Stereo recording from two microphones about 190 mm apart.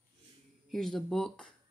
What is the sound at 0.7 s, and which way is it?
Speech, centre (ahead or behind).